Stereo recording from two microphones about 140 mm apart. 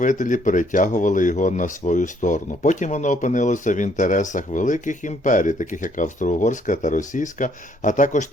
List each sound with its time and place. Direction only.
0.0 s speech: 65° left (ahead or behind)